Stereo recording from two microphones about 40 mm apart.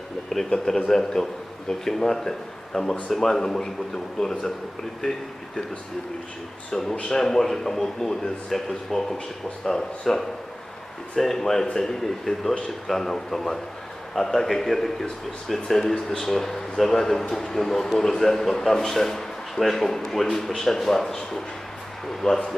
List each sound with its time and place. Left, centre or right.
0.3 s speech: centre
7.1 s speech: centre
16.0 s speech: centre
16.2 s speech: centre